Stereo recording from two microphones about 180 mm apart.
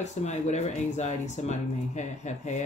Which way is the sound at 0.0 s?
40° left (ahead or behind).